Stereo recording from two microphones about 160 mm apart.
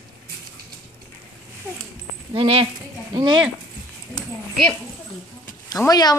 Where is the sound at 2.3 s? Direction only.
35° right (ahead or behind).